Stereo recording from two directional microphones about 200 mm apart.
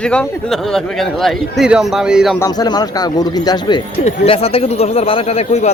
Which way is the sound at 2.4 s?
20° left (ahead or behind).